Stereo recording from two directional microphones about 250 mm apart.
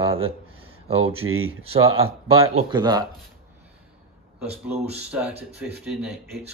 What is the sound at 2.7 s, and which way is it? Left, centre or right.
Speech, centre.